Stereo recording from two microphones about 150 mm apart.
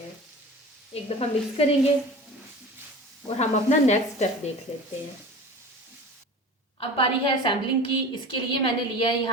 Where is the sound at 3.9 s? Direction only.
50° left (ahead or behind).